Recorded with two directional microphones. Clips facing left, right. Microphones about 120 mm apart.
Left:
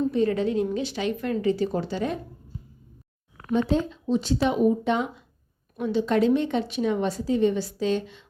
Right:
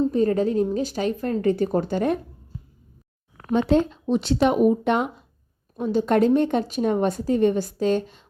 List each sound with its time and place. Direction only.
0.0 s a woman's voice: 40° right (ahead or behind)
3.3 s a sound: 60° right (ahead or behind)
3.7 s speech: 65° right (ahead or behind)
5.7 s a woman's voice: 40° right (ahead or behind)